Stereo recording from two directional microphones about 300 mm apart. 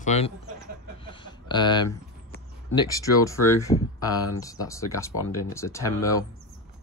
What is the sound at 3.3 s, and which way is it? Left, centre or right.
Speech, centre.